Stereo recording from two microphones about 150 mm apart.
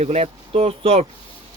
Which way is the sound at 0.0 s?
45° right (ahead or behind).